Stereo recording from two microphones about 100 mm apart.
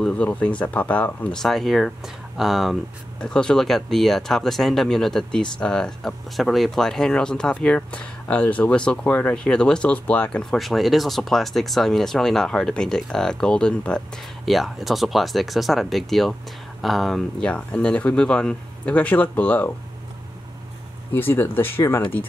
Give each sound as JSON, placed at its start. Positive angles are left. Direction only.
{"t": 0.0, "sound": "speech", "side_deg": 10}
{"t": 21.1, "sound": "speech", "side_deg": 20}